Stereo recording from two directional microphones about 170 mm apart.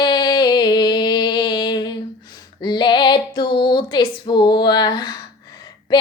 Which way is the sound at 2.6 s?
25° left (ahead or behind).